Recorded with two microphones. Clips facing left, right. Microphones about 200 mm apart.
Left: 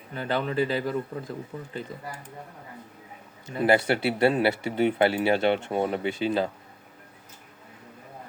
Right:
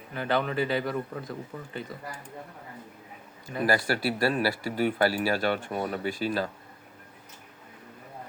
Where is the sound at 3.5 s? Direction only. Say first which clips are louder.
Left 4 dB; 25° left (ahead or behind).